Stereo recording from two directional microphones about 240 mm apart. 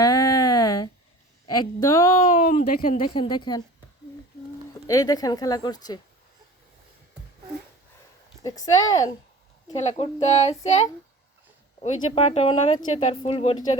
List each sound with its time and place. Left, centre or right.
0.0 s a sound: centre
1.5 s speech: centre
2.3 s speech: left
3.0 s speech: centre
4.9 s speech: centre
8.4 s speech: centre
9.7 s speech: left